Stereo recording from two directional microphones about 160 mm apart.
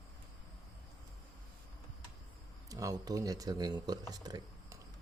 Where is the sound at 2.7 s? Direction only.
20° right (ahead or behind).